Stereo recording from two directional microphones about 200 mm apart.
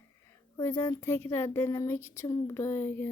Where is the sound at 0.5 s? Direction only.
15° left (ahead or behind).